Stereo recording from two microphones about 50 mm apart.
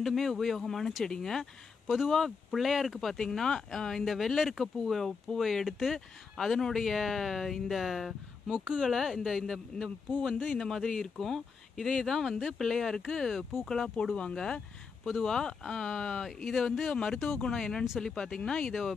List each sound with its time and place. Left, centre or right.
0.0 s speech: centre
1.9 s speech: centre
5.9 s speech: centre
16.3 s speech: centre
18.7 s speech: centre